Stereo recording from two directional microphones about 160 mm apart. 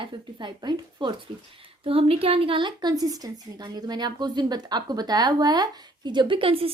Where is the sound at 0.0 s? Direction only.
30° right (ahead or behind).